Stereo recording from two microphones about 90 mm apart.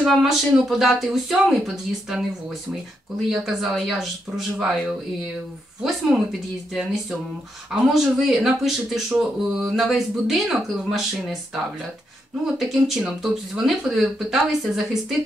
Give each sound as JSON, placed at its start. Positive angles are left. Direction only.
{"t": 0.0, "sound": "speech", "side_deg": 0}
{"t": 2.7, "sound": "speech", "side_deg": -5}